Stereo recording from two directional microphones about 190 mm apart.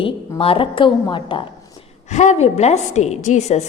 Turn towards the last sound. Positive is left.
turn(degrees=35)  # may be behind; listen again after turning